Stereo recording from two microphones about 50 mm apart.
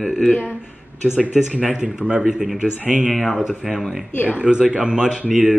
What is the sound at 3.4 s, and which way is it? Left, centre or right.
Speech, centre.